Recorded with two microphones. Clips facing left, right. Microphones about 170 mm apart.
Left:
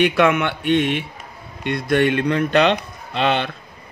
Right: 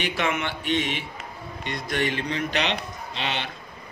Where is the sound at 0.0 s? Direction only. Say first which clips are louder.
Left 10 dB; 60° left (ahead or behind).